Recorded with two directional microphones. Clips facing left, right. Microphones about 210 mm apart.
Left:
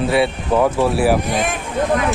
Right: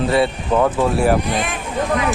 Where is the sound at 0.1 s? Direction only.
5° left (ahead or behind).